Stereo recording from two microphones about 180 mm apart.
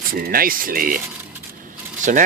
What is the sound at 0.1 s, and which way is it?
Speech, 55° right (ahead or behind).